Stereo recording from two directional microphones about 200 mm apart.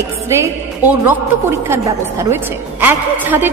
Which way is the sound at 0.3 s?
10° right (ahead or behind).